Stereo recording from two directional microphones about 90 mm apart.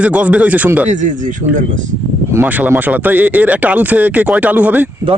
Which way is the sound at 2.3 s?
20° right (ahead or behind).